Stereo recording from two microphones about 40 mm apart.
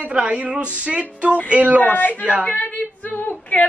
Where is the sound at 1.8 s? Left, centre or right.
Left.